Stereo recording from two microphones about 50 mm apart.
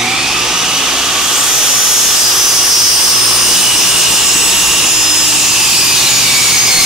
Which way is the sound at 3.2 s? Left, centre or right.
Centre.